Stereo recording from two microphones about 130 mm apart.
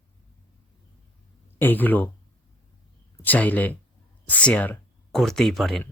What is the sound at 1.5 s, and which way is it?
Speech, 15° left (ahead or behind).